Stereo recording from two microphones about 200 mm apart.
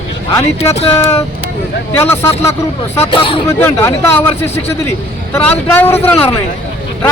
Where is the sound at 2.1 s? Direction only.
15° left (ahead or behind).